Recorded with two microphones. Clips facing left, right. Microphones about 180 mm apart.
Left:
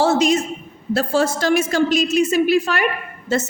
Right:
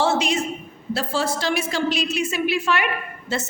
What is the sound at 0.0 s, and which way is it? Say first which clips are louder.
A man's voice: left 5 dB; 40° left (ahead or behind).